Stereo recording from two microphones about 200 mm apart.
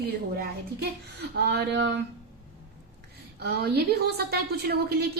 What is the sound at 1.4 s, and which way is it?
Speech, 60° right (ahead or behind).